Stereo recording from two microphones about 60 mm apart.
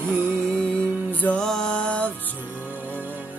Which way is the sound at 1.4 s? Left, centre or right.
Centre.